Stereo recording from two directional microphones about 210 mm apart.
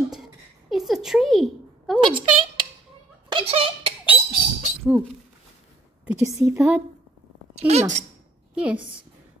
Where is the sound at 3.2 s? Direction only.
25° right (ahead or behind).